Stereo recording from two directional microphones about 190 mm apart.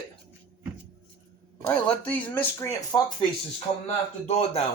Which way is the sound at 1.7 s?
10° left (ahead or behind).